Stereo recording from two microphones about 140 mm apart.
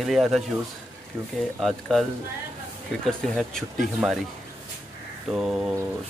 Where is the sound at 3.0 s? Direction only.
5° left (ahead or behind).